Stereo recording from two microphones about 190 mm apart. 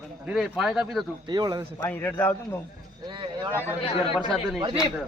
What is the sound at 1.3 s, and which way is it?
Speech, 20° right (ahead or behind).